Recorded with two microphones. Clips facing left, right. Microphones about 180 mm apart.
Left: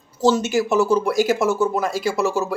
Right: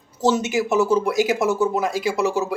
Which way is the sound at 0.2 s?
20° right (ahead or behind).